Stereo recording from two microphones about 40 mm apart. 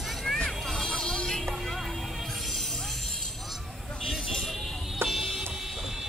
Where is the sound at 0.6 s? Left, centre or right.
Centre.